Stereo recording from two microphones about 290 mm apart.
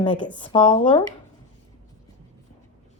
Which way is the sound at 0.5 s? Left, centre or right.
Centre.